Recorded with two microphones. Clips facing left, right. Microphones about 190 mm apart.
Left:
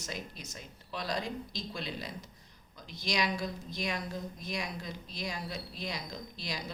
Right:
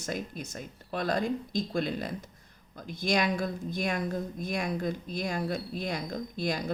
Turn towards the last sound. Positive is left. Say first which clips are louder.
# right 9 dB
turn(degrees=-55)  # may be behind; listen again after turning